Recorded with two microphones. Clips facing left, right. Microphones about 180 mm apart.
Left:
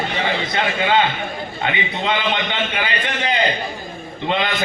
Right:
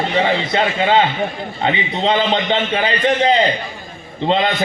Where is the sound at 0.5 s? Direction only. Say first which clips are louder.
Right 2 dB; 30° right (ahead or behind).